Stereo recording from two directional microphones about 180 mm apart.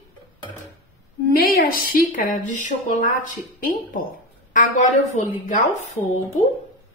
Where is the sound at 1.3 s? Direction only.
55° left (ahead or behind).